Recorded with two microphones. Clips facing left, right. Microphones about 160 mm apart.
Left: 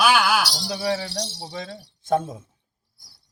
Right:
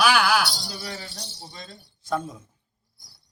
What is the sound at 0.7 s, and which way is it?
Speech, 75° left (ahead or behind).